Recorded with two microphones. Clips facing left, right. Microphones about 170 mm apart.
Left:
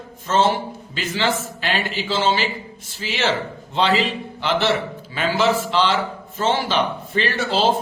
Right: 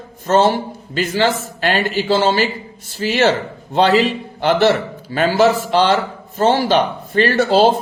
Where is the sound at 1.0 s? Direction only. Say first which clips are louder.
Right 6 dB; 50° right (ahead or behind).